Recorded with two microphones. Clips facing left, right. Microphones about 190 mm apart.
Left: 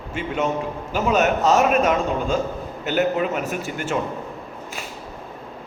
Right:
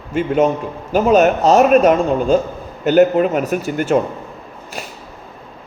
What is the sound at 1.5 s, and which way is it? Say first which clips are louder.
Speech: right 9 dB; 50° right (ahead or behind).